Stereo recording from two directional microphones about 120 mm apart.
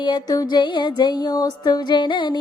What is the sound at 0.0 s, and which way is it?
Music, 35° left (ahead or behind).